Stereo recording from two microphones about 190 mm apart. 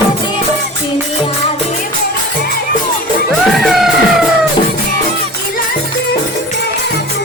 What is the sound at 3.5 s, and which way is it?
Music, centre (ahead or behind).